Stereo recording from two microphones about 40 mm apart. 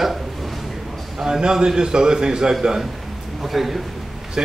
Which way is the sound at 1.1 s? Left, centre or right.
Centre.